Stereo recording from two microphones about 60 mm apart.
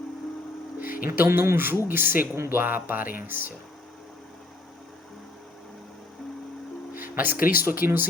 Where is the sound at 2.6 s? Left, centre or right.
Right.